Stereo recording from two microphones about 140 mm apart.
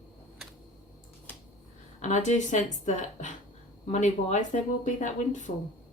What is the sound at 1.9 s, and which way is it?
A woman's voice, 60° left (ahead or behind).